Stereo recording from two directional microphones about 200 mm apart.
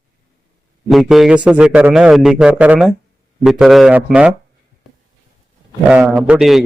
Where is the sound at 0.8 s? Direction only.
Centre (ahead or behind).